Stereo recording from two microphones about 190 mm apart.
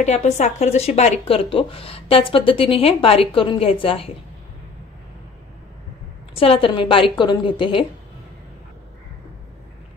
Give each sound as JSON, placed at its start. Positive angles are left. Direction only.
{"t": 0.0, "sound": "speech", "side_deg": 35}
{"t": 6.3, "sound": "speech", "side_deg": 30}